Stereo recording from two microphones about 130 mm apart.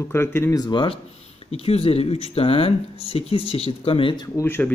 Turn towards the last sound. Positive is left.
turn(degrees=15)  # may be behind; listen again after turning